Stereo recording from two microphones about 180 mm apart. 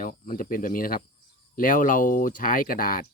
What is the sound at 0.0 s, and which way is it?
Speech, 50° left (ahead or behind).